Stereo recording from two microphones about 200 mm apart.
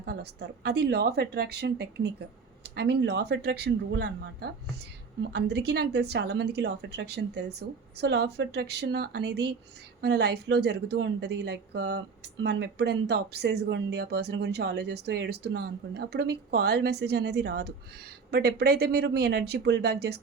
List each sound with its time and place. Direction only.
0.0 s speech: 55° right (ahead or behind)